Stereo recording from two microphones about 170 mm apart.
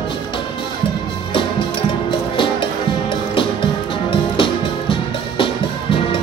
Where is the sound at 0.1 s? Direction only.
30° left (ahead or behind).